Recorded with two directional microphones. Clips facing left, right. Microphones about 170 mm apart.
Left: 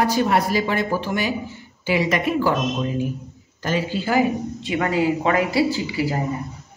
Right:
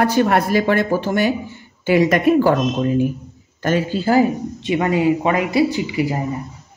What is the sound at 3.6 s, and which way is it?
Speech, 50° right (ahead or behind).